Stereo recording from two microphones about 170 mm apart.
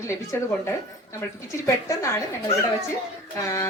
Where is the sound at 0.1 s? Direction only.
15° left (ahead or behind).